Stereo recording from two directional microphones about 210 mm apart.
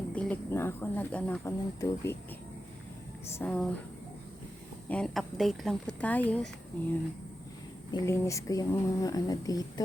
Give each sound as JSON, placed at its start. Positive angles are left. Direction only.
{"t": 0.1, "sound": "speech", "side_deg": 5}
{"t": 3.3, "sound": "a woman's voice", "side_deg": 5}
{"t": 4.9, "sound": "a woman's voice", "side_deg": 5}